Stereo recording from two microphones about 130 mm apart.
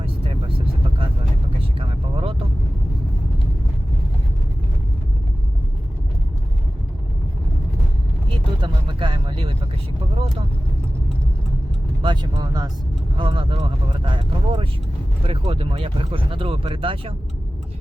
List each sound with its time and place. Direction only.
0.0 s vehicle: 45° right (ahead or behind)
1.8 s vehicle: 45° right (ahead or behind)
8.3 s vehicle: 40° right (ahead or behind)
12.0 s speech: 35° right (ahead or behind)